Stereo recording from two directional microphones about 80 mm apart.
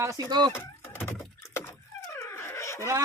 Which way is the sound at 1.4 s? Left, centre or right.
Left.